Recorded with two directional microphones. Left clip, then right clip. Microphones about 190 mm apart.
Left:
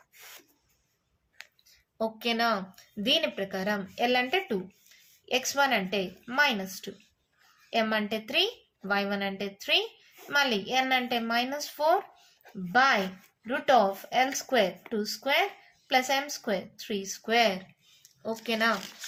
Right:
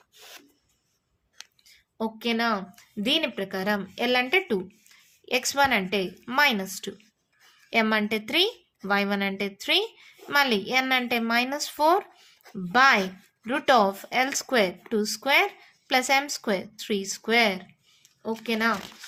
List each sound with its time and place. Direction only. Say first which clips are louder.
2.0 s a woman's voice: right 1 dB; 30° right (ahead or behind)
18.2 s speech: right 2 dB; 30° right (ahead or behind)